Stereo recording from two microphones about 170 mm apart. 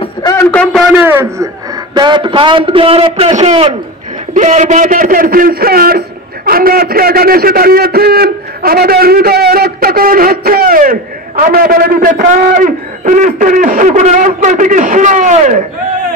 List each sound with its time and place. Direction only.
0.0 s a sound: 20° left (ahead or behind)
1.0 s a man's voice: 15° right (ahead or behind)
2.0 s a man's voice: 30° right (ahead or behind); by 15.6 s 45° right (ahead or behind)